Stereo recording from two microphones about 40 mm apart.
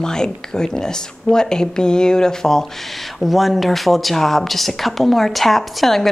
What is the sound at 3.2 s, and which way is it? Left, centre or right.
Speech, centre.